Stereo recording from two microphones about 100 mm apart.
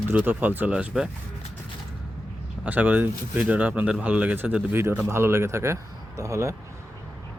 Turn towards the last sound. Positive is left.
turn(degrees=-30)  # may be behind; listen again after turning